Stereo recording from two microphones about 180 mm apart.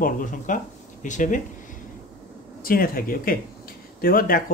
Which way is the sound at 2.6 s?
55° left (ahead or behind).